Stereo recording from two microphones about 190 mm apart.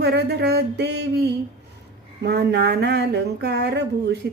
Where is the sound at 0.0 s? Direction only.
60° right (ahead or behind).